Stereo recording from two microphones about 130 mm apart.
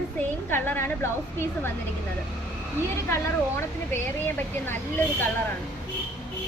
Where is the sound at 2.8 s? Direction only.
20° left (ahead or behind).